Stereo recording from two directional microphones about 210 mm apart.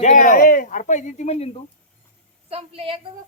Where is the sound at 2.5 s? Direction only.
30° right (ahead or behind).